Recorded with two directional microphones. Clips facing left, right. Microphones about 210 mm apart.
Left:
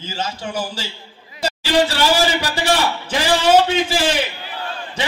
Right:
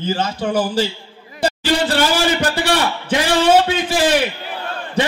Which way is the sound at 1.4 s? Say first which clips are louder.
Even; 50° right (ahead or behind).